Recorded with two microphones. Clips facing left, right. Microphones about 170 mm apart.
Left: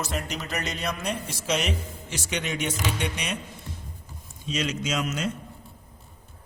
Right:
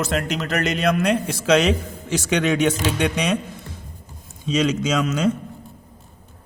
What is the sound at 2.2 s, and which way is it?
Speech, 75° right (ahead or behind).